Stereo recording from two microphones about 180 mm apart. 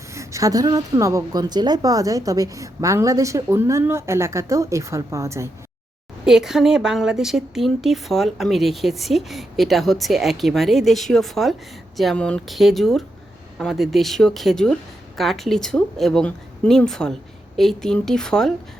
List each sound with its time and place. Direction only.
0.1 s a woman's voice: 15° right (ahead or behind)
6.2 s speech: 5° right (ahead or behind)